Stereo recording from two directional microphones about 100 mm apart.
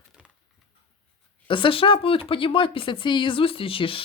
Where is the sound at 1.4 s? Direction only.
55° left (ahead or behind).